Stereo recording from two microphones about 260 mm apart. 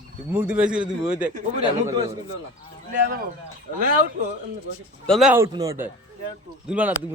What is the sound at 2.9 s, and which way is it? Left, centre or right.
Speech, right.